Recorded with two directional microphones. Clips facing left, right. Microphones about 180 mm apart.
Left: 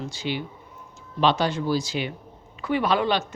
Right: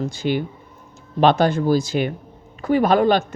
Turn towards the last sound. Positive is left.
turn(degrees=-50)  # may be behind; listen again after turning